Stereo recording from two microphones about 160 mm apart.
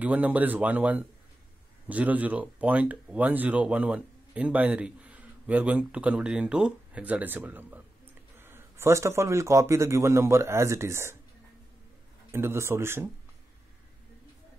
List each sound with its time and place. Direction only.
0.0 s speech: 10° right (ahead or behind)
12.3 s speech: 15° right (ahead or behind)